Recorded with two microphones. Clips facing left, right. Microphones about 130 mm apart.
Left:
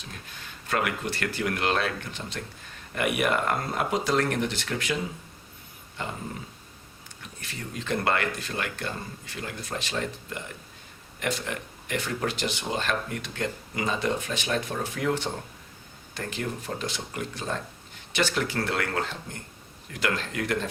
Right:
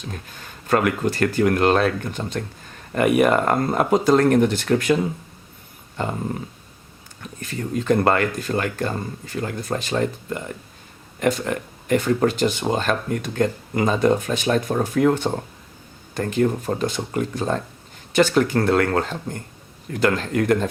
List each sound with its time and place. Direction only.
0.7 s speech: 45° right (ahead or behind)
6.0 s speech: 45° right (ahead or behind)
7.2 s speech: 45° right (ahead or behind)
11.2 s speech: 45° right (ahead or behind)